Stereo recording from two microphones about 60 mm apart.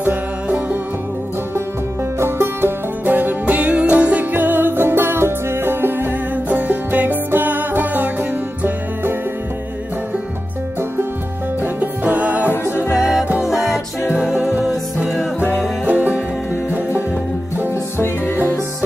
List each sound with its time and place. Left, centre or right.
0.0 s music: right
2.1 s music: right
3.1 s music: right
6.3 s music: right
11.6 s music: right
12.9 s music: centre
15.8 s music: right
18.0 s music: left